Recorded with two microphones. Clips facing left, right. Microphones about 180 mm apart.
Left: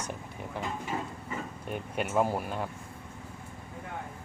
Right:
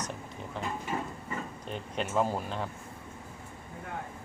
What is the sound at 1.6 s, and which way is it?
Speech, 10° left (ahead or behind).